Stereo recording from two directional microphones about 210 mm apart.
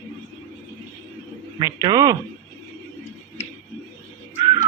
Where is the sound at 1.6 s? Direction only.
20° right (ahead or behind).